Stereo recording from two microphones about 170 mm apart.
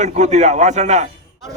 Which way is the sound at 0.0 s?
45° right (ahead or behind).